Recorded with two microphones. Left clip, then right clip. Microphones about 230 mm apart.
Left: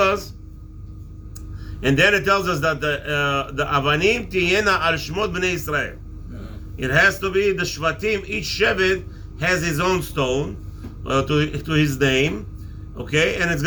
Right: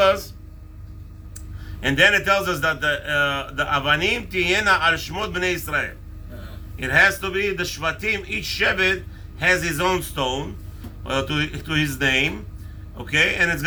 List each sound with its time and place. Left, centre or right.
1.8 s a man's voice: centre